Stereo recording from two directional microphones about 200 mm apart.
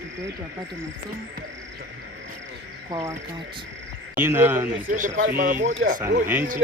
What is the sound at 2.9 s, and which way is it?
Speech, 15° right (ahead or behind).